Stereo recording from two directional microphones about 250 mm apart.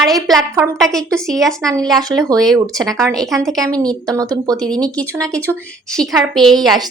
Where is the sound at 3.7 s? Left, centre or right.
Centre.